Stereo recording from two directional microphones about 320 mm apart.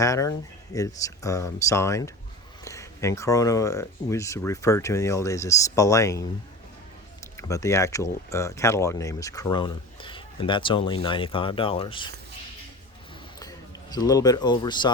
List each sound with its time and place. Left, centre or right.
0.0 s speech: centre
7.3 s speech: centre
13.4 s speech: centre